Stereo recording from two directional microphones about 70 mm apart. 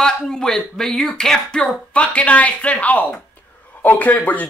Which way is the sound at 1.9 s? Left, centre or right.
Centre.